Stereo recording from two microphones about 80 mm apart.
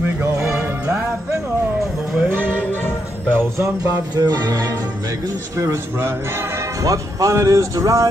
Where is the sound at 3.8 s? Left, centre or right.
Right.